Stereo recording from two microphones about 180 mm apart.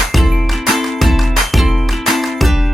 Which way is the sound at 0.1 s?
Centre (ahead or behind).